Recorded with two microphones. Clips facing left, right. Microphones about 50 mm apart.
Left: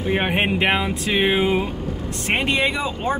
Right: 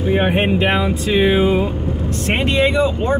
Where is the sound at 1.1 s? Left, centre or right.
Left.